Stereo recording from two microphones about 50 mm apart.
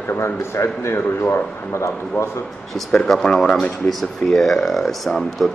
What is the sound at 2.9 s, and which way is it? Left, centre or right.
Speech, centre.